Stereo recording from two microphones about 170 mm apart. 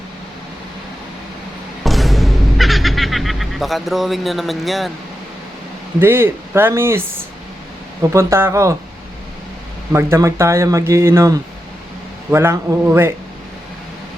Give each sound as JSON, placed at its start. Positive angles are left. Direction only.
{"t": 1.8, "sound": "speech", "side_deg": 0}
{"t": 6.0, "sound": "speech", "side_deg": -15}
{"t": 8.1, "sound": "speech", "side_deg": -15}
{"t": 9.9, "sound": "speech", "side_deg": -15}